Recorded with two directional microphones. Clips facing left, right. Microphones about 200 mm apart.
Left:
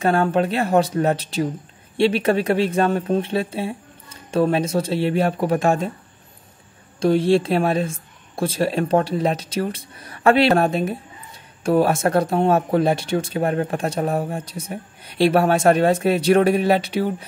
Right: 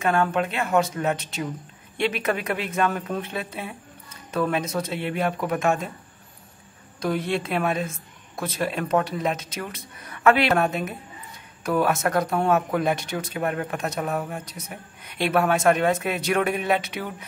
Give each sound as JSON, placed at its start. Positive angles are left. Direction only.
{"t": 0.0, "sound": "speech", "side_deg": 35}
{"t": 7.0, "sound": "speech", "side_deg": 30}